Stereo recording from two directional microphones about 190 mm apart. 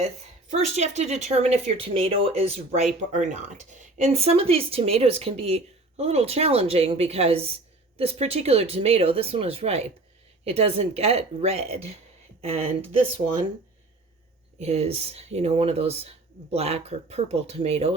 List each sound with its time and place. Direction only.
0.5 s speech: 35° right (ahead or behind)
14.6 s speech: 35° right (ahead or behind)